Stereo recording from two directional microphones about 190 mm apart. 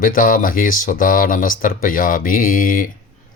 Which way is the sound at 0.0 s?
45° left (ahead or behind).